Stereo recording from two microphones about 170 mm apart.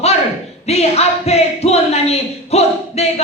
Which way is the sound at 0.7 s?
40° left (ahead or behind).